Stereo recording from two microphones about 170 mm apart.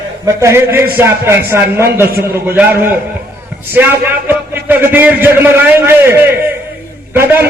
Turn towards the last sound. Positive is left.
turn(degrees=-10)  # may be behind; listen again after turning